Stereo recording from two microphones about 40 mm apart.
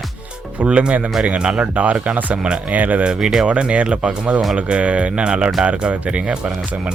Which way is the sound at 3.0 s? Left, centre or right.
Centre.